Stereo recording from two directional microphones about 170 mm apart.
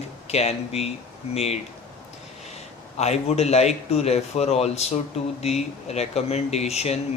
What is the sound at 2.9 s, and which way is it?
Speech, 40° left (ahead or behind).